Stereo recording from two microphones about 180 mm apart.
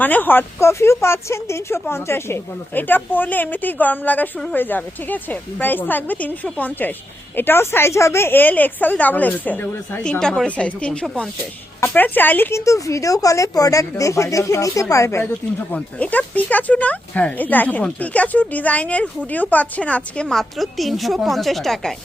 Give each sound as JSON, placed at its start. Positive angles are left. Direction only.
{"t": 0.0, "sound": "a woman's voice", "side_deg": 10}